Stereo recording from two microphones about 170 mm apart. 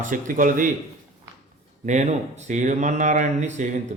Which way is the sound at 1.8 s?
45° right (ahead or behind).